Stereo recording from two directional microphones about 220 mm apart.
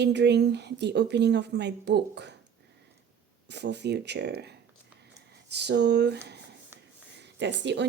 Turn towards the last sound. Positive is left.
turn(degrees=-55)  # may be behind; listen again after turning